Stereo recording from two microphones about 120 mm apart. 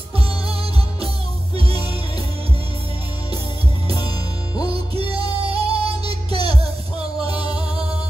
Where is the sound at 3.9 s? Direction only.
35° left (ahead or behind).